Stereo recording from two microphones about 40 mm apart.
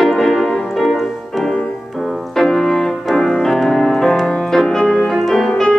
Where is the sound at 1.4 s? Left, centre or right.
Centre.